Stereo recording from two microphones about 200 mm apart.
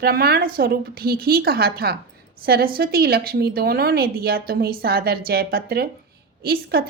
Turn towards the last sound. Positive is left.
turn(degrees=-50)  # may be behind; listen again after turning